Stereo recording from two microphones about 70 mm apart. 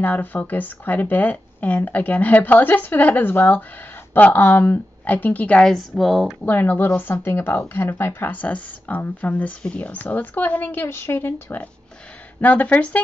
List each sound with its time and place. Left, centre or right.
0.0 s speech: left
5.6 s a woman's voice: centre
6.4 s speech: left
12.4 s speech: left